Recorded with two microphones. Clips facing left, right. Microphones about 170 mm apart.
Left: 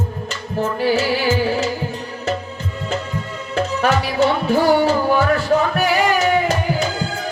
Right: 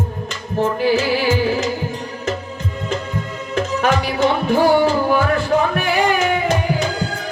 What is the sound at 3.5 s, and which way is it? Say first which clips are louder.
Music: even; 35° left (ahead or behind).